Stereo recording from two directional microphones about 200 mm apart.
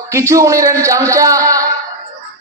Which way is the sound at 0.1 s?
15° right (ahead or behind).